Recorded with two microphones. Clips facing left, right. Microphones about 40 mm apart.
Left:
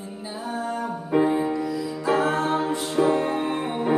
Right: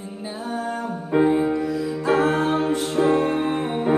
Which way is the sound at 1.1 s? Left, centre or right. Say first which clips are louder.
Right 3 dB; centre.